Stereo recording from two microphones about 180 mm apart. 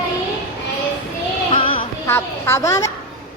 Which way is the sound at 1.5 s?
30° left (ahead or behind).